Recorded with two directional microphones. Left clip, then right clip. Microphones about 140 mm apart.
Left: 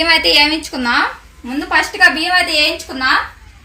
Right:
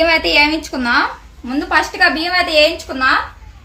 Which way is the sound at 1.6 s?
15° left (ahead or behind).